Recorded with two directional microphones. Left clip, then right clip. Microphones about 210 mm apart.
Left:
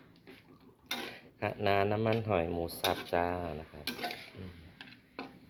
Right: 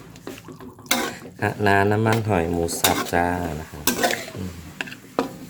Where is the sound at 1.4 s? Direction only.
10° left (ahead or behind).